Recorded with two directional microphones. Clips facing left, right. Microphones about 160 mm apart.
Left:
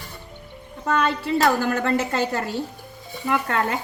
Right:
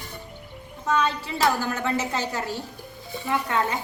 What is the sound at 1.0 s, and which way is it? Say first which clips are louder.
A woman's voice: left 5 dB; 60° left (ahead or behind).